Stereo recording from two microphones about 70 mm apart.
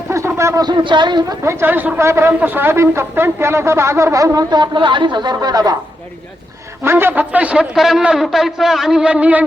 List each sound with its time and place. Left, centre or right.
0.3 s a sound: right
0.6 s speech: right
1.5 s speech: right
1.7 s a man's voice: right
2.0 s speech: right
2.4 s speech: right
4.5 s speech: right
6.8 s a man's voice: right